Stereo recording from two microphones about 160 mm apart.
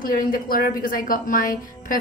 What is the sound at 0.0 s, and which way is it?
A woman's voice, 65° left (ahead or behind).